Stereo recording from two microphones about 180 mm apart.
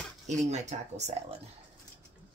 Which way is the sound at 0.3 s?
40° right (ahead or behind).